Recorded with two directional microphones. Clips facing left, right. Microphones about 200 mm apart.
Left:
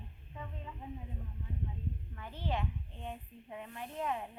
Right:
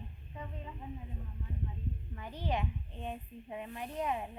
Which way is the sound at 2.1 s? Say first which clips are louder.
Right 2 dB; 15° right (ahead or behind).